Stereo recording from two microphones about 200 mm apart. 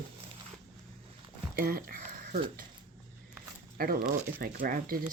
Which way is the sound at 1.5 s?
45° right (ahead or behind).